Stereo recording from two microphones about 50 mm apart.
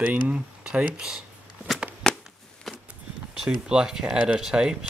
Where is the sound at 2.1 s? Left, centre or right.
Centre.